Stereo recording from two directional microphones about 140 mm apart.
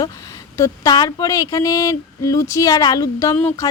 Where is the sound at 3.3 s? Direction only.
15° left (ahead or behind).